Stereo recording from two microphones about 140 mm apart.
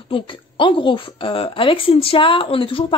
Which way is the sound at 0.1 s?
35° left (ahead or behind).